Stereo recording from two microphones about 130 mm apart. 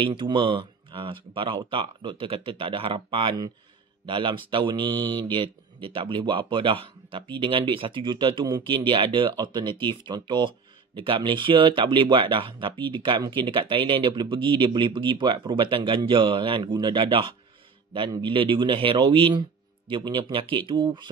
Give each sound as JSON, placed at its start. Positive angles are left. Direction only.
{"t": 0.0, "sound": "speech", "side_deg": -40}